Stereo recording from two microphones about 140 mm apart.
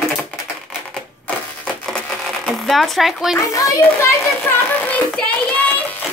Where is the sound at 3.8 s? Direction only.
20° left (ahead or behind).